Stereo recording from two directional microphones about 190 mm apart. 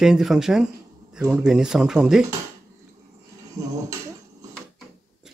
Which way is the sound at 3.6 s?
20° right (ahead or behind).